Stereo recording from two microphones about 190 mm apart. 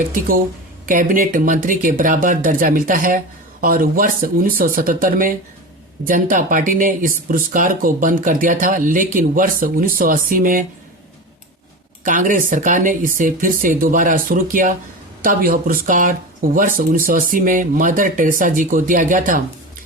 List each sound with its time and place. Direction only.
0.1 s speech: 50° right (ahead or behind)
12.0 s speech: 45° right (ahead or behind)